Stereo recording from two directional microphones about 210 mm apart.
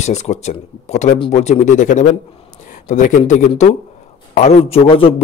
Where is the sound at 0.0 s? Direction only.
35° left (ahead or behind).